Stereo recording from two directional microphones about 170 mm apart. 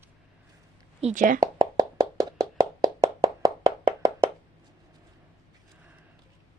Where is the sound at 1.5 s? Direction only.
20° right (ahead or behind).